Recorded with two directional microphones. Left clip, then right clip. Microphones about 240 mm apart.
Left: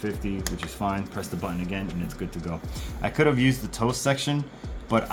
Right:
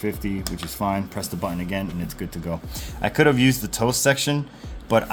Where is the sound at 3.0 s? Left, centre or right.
Right.